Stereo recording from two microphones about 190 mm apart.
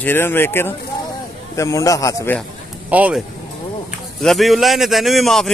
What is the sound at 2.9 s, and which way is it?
A man's voice, 5° right (ahead or behind).